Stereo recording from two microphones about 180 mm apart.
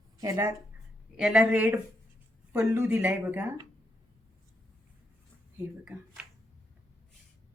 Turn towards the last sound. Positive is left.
turn(degrees=-5)  # may be behind; listen again after turning